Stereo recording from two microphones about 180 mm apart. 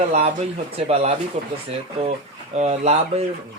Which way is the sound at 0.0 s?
35° right (ahead or behind).